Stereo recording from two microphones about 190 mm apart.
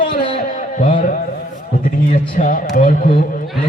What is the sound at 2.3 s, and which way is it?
Speech, 45° left (ahead or behind).